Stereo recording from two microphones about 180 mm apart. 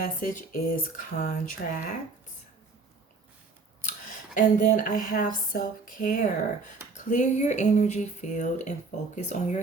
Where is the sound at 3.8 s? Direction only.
45° left (ahead or behind).